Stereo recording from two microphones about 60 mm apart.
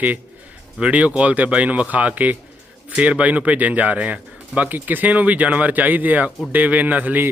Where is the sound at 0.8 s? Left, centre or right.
Right.